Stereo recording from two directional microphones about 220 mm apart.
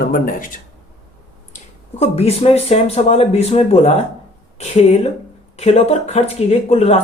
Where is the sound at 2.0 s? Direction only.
30° left (ahead or behind).